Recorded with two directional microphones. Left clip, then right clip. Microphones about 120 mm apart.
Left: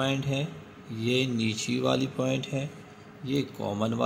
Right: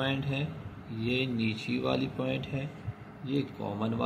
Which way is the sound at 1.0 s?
90° left.